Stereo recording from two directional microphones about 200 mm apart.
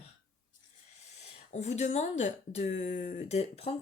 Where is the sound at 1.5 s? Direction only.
35° left (ahead or behind).